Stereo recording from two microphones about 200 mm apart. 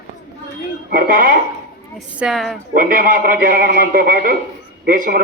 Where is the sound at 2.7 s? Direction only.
45° right (ahead or behind).